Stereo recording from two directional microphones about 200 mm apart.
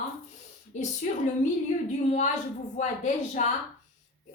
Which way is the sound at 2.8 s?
35° left (ahead or behind).